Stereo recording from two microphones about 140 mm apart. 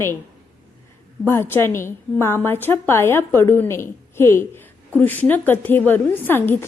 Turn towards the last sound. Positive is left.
turn(degrees=15)  # may be behind; listen again after turning